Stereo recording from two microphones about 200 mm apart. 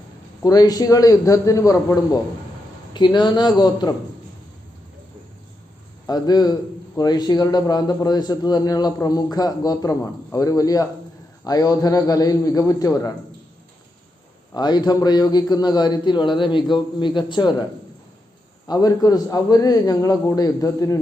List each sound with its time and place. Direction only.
0.4 s a man's voice: 20° left (ahead or behind)
6.1 s a man's voice: 20° left (ahead or behind)
14.5 s a man's voice: 20° left (ahead or behind)
18.7 s a man's voice: 20° left (ahead or behind)